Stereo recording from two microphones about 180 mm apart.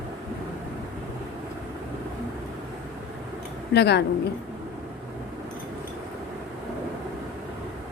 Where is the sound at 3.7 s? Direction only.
70° left (ahead or behind).